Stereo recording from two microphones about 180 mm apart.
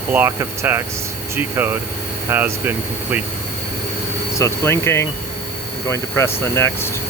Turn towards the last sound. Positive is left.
turn(degrees=15)  # may be behind; listen again after turning